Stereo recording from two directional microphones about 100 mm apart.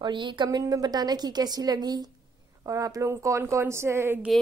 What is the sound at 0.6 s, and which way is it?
A woman's voice, 40° right (ahead or behind).